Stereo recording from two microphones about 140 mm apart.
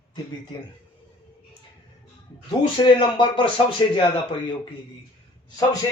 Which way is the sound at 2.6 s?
35° left (ahead or behind).